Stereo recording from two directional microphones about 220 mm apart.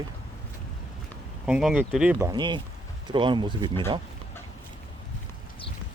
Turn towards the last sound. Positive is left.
turn(degrees=-20)  # may be behind; listen again after turning